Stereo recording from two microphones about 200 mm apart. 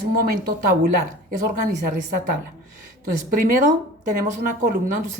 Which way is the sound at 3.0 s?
40° right (ahead or behind).